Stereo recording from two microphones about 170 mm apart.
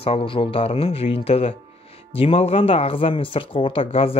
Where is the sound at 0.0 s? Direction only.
35° left (ahead or behind).